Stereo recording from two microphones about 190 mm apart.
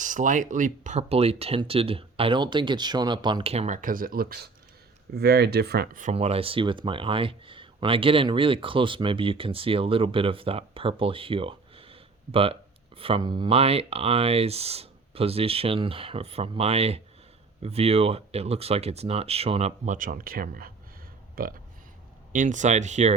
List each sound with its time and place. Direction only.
0.0 s speech: 40° right (ahead or behind)